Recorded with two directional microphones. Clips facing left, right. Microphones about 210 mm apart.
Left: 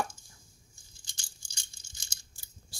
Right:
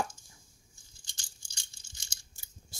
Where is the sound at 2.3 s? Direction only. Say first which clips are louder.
Right 1 dB; 20° right (ahead or behind).